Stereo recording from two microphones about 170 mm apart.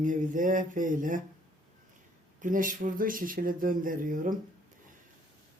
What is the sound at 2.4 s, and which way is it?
Speech, 50° right (ahead or behind).